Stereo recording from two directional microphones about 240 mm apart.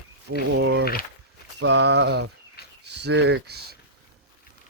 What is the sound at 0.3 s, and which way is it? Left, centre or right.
Speech, right.